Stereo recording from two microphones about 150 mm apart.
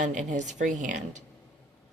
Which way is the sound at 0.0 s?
55° right (ahead or behind).